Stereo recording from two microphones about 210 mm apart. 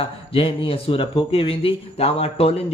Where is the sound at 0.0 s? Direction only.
25° left (ahead or behind).